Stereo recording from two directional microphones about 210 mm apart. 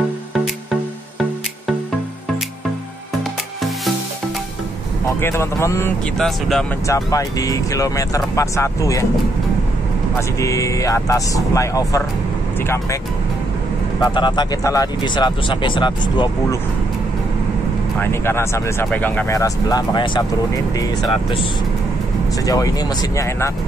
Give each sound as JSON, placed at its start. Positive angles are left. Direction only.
{"t": 5.2, "sound": "speech", "side_deg": 10}
{"t": 6.1, "sound": "speech", "side_deg": 0}
{"t": 6.9, "sound": "speech", "side_deg": 15}
{"t": 10.1, "sound": "speech", "side_deg": 15}
{"t": 14.0, "sound": "speech", "side_deg": 20}
{"t": 17.9, "sound": "speech", "side_deg": 10}
{"t": 22.4, "sound": "speech", "side_deg": 15}